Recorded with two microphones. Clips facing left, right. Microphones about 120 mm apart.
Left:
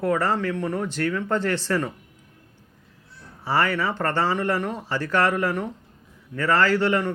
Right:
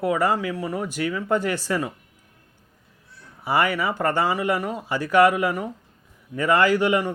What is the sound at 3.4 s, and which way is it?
Speech, 15° right (ahead or behind).